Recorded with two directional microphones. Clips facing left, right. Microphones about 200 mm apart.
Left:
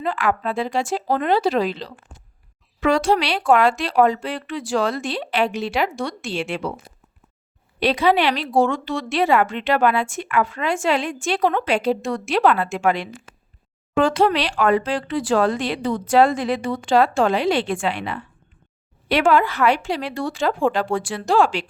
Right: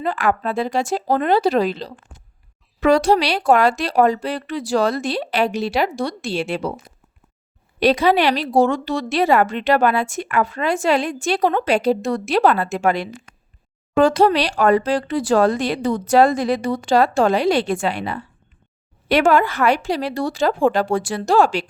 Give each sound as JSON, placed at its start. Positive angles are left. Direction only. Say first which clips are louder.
{"t": 0.0, "sound": "a woman's voice", "louder": "right 2 dB", "side_deg": -40}
{"t": 7.8, "sound": "a woman's voice", "louder": "right 2 dB", "side_deg": -40}